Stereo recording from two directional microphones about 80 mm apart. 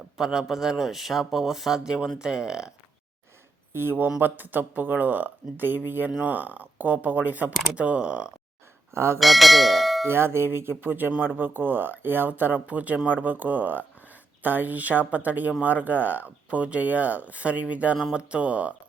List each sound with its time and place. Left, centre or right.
0.2 s a man's voice: centre
3.7 s speech: right; by 8.3 s centre
8.9 s speech: right
9.1 s bell: centre
10.1 s speech: right; by 18.7 s centre